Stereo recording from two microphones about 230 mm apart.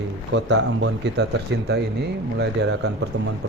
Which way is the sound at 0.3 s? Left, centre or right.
Right.